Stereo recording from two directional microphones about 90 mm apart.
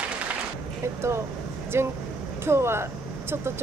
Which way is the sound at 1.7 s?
30° right (ahead or behind).